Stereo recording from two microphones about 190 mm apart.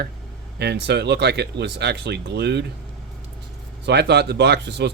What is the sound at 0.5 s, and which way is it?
Speech, 60° right (ahead or behind).